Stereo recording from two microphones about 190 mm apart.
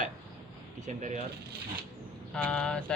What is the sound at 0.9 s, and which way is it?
Speech, 40° right (ahead or behind).